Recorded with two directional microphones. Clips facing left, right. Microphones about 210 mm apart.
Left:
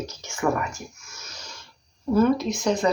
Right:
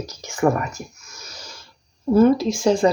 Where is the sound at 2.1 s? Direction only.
30° right (ahead or behind).